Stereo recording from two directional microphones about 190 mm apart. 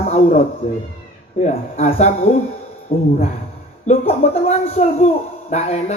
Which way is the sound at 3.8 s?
35° left (ahead or behind).